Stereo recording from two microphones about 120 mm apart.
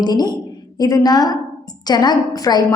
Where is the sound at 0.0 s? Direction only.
35° left (ahead or behind).